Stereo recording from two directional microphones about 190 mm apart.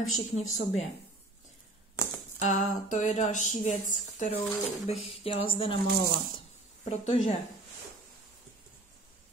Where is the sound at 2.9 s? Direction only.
40° left (ahead or behind).